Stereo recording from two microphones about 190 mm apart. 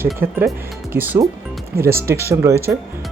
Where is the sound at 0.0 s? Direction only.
10° right (ahead or behind).